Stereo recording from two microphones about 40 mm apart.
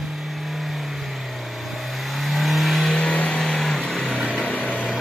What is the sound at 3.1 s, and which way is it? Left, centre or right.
Vehicle, left.